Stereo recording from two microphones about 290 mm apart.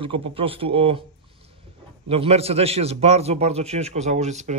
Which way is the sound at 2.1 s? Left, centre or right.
Right.